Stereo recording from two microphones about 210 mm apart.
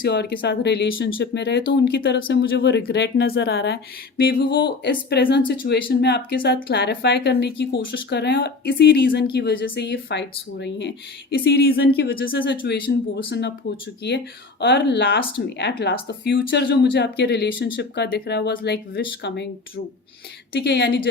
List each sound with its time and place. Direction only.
0.0 s speech: 50° left (ahead or behind)